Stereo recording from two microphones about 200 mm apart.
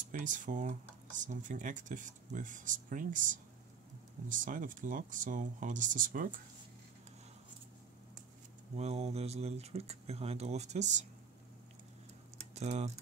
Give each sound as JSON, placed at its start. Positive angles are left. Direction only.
{"t": 0.0, "sound": "speech", "side_deg": -40}
{"t": 8.7, "sound": "speech", "side_deg": -30}
{"t": 12.5, "sound": "speech", "side_deg": -35}